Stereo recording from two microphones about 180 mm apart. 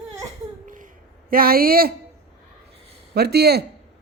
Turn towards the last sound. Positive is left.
turn(degrees=-65)  # may be behind; listen again after turning